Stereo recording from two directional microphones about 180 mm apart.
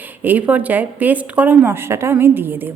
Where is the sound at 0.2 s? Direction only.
10° right (ahead or behind).